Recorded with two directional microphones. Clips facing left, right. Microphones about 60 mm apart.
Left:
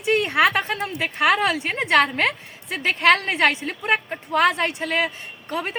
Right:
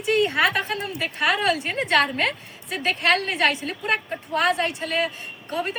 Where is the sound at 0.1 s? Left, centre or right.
Left.